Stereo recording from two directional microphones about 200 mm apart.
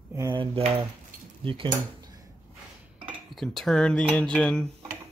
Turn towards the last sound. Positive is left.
turn(degrees=5)  # may be behind; listen again after turning